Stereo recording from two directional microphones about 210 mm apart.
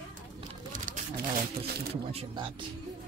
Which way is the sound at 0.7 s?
40° right (ahead or behind).